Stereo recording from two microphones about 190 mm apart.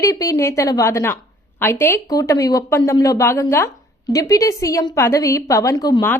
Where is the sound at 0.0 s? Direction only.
20° left (ahead or behind).